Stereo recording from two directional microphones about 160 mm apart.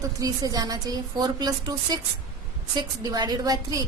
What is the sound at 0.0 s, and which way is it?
A woman's voice, 20° right (ahead or behind).